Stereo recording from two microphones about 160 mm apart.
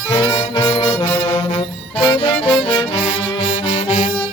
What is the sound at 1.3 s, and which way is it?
Music, 40° left (ahead or behind).